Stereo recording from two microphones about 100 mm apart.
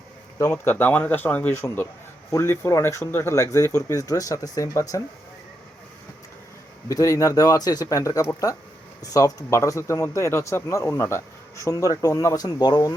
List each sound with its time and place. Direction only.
0.5 s speech: 20° left (ahead or behind)
6.8 s speech: 35° left (ahead or behind)